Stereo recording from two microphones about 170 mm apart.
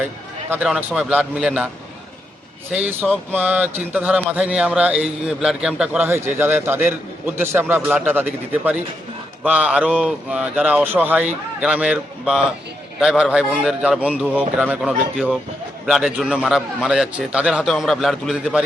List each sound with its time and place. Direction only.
0.5 s a man's voice: 10° right (ahead or behind)
2.7 s a man's voice: 10° right (ahead or behind)